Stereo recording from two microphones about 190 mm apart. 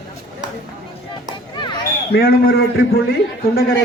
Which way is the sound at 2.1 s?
55° left (ahead or behind).